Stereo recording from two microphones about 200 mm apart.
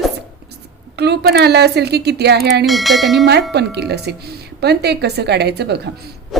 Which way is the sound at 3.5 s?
55° right (ahead or behind).